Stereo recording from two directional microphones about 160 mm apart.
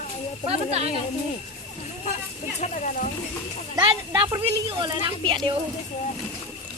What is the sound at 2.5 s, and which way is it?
Speech, 50° left (ahead or behind).